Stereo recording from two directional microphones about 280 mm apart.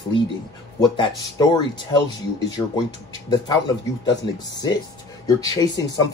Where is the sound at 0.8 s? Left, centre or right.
Centre.